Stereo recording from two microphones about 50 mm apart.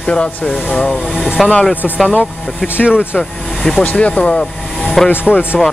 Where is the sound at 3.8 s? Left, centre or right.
Left.